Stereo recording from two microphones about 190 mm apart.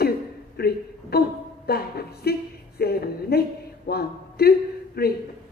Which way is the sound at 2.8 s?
55° left (ahead or behind).